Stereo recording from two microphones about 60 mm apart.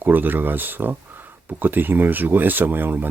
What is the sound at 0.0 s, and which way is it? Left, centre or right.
Speech, right.